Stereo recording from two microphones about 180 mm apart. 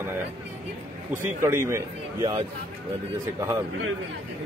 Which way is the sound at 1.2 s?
15° right (ahead or behind).